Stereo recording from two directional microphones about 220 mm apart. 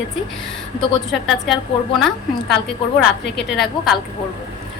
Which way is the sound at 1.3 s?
Centre (ahead or behind).